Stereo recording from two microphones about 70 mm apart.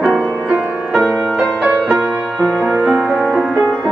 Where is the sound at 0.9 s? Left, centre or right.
Centre.